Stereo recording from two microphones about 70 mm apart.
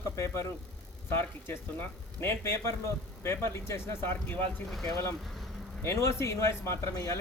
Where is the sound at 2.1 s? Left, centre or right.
Left.